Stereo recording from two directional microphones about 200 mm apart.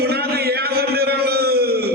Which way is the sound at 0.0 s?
50° right (ahead or behind).